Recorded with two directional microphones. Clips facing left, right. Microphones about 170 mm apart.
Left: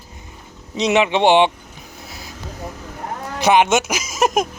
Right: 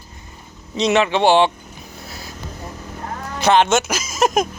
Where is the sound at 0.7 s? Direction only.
15° left (ahead or behind).